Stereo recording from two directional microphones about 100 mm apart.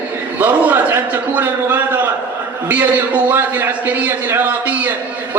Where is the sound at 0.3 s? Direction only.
20° right (ahead or behind).